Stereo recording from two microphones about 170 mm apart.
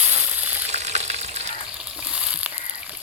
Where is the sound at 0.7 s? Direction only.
40° right (ahead or behind).